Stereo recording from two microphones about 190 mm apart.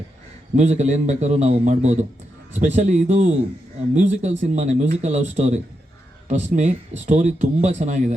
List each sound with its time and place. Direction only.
0.5 s speech: 35° right (ahead or behind)